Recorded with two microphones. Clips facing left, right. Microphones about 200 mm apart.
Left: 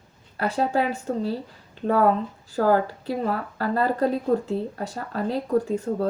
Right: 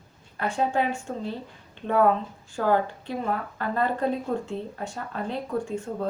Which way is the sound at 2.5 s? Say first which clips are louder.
Left 3 dB; 35° left (ahead or behind).